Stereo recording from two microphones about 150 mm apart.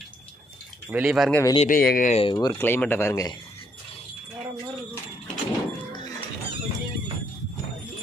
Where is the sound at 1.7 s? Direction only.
75° left (ahead or behind).